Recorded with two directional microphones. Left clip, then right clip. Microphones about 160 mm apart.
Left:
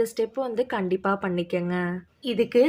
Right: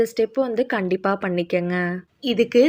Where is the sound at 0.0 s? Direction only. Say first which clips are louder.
Right 5 dB; 15° right (ahead or behind).